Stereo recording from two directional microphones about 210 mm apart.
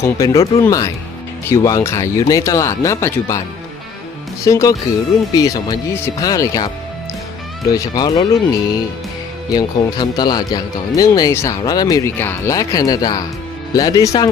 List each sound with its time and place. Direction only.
0.0 s speech: 15° left (ahead or behind)
4.4 s speech: 15° left (ahead or behind)
7.7 s speech: 20° left (ahead or behind)